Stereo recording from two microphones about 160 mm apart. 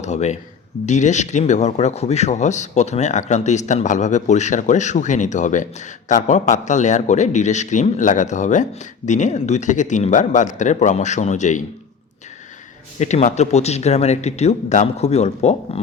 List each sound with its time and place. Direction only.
0.0 s speech: 45° left (ahead or behind)
13.0 s speech: 45° left (ahead or behind)